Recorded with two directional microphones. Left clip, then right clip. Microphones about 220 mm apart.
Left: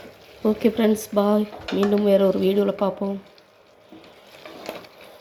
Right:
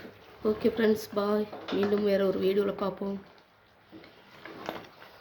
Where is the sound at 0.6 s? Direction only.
20° left (ahead or behind).